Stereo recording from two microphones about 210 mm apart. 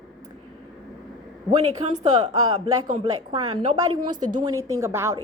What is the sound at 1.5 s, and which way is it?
Speech, 30° right (ahead or behind).